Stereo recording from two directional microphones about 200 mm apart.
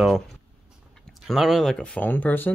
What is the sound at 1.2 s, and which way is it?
Speech, centre (ahead or behind).